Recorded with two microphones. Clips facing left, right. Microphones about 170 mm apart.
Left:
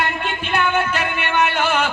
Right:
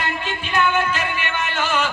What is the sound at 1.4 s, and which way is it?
Speech, 60° left (ahead or behind).